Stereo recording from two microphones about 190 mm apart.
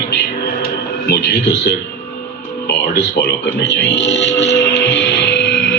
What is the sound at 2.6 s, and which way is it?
Music, 60° left (ahead or behind).